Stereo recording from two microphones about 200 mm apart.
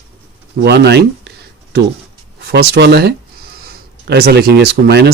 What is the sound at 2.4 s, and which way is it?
Speech, 55° right (ahead or behind).